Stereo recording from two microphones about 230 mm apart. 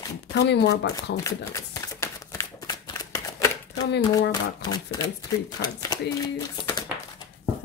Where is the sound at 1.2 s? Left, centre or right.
Centre.